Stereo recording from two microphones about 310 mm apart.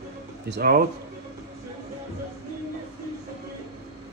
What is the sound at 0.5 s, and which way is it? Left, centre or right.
Speech, right.